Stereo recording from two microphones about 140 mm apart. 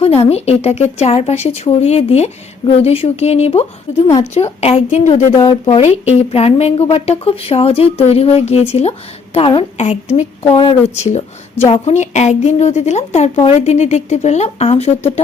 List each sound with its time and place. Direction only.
0.0 s speech: 45° left (ahead or behind)
5.4 s speech: 35° left (ahead or behind)